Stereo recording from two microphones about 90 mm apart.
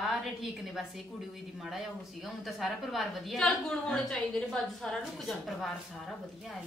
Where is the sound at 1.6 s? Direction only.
Centre (ahead or behind).